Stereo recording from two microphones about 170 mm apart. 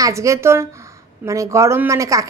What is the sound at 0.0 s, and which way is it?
A woman's voice, 20° right (ahead or behind).